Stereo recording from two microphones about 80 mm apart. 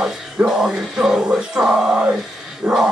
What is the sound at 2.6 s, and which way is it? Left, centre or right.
Dog, right.